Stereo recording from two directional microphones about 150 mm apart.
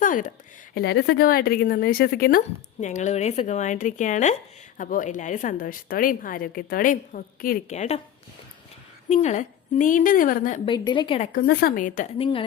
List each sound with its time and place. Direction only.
0.0 s a sound: 60° left (ahead or behind)
0.7 s speech: 90° left; by 2.4 s 75° left (ahead or behind)
2.8 s a woman's voice: 55° left (ahead or behind)
7.7 s speech: 50° left (ahead or behind)
9.0 s a woman's voice: 50° left (ahead or behind)
10.7 s a woman's voice: 30° left (ahead or behind)
11.3 s a woman's voice: 85° left; by 12.0 s 60° left (ahead or behind)
12.1 s a woman's voice: 35° left (ahead or behind)